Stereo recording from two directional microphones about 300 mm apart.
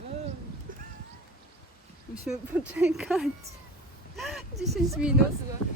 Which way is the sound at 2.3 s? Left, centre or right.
Centre.